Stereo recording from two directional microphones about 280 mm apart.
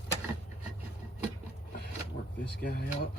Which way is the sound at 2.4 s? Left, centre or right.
Left.